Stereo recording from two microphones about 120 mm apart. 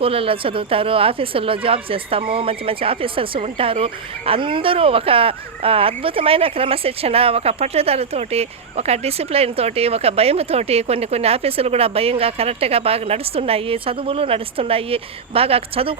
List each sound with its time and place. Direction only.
0.0 s a woman's voice: 50° right (ahead or behind)